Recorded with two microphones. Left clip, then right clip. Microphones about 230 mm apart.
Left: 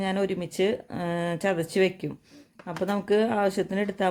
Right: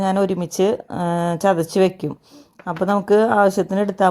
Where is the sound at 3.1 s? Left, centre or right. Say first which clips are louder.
Right 9 dB; right.